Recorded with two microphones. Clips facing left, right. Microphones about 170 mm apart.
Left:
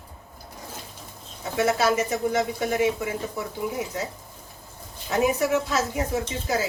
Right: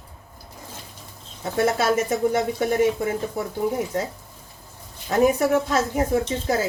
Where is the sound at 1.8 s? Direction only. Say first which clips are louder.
Right 2 dB; 50° right (ahead or behind).